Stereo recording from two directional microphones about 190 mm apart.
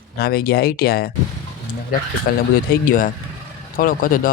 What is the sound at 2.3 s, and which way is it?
Speech, 55° left (ahead or behind).